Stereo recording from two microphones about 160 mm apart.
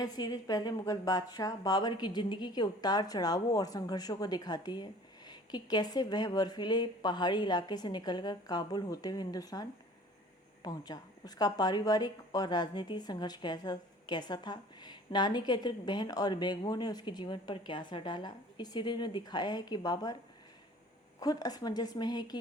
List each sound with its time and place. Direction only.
0.0 s speech: 25° left (ahead or behind)
21.2 s speech: 25° left (ahead or behind)